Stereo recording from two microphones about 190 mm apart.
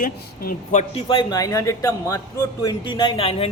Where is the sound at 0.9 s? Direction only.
25° left (ahead or behind).